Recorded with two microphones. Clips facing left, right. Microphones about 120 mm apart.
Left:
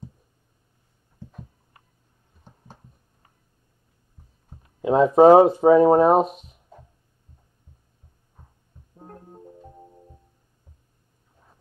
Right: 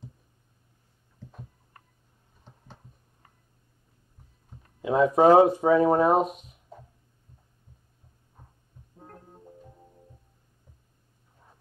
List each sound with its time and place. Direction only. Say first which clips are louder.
4.8 s speech: left 5 dB; 30° left (ahead or behind)
8.9 s music: left 5 dB; 30° left (ahead or behind)